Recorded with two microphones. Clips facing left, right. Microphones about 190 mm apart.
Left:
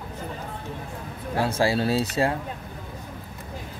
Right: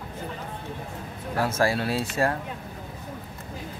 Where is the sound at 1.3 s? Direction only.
15° left (ahead or behind).